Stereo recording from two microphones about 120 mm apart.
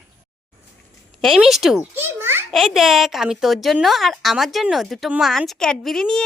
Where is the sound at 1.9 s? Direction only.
20° right (ahead or behind).